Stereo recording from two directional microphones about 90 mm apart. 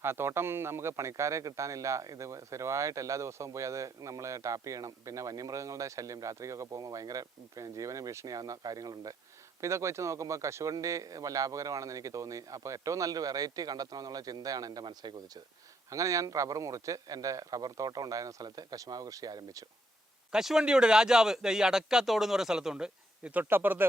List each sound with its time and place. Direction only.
0.0 s a man's voice: 25° right (ahead or behind); by 9.1 s 45° right (ahead or behind)
9.6 s a man's voice: 35° right (ahead or behind); by 15.1 s 50° right (ahead or behind)
15.9 s a man's voice: 40° right (ahead or behind)
20.3 s speech: 5° right (ahead or behind)
23.4 s speech: 25° right (ahead or behind)